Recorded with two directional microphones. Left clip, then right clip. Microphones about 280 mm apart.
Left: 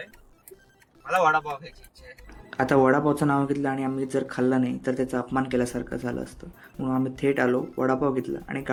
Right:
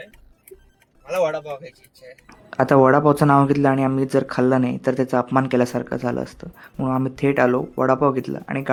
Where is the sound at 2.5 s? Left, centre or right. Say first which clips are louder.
Right 6 dB; right.